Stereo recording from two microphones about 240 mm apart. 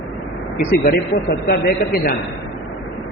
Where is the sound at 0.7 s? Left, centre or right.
Left.